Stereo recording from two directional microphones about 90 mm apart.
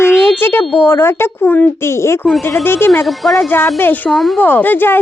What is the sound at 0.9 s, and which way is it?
Speech, 25° left (ahead or behind).